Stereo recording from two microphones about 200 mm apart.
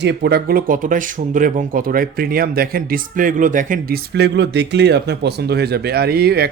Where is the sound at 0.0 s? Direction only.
55° right (ahead or behind).